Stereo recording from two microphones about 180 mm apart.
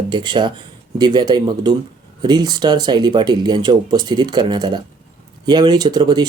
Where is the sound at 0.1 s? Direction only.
25° right (ahead or behind).